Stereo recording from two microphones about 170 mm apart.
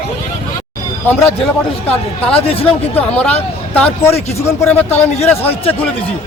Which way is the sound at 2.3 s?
35° left (ahead or behind).